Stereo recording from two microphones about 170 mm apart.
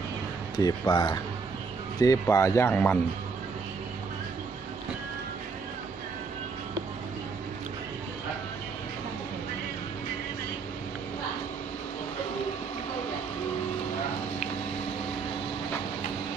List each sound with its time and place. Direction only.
0.6 s speech: 25° left (ahead or behind)